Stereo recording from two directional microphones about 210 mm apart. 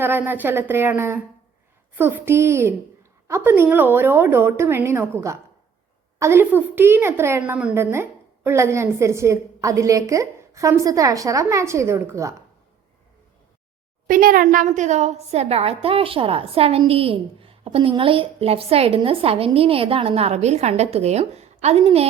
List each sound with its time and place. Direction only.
0.0 s a woman's voice: 10° right (ahead or behind)
14.1 s a woman's voice: 40° right (ahead or behind)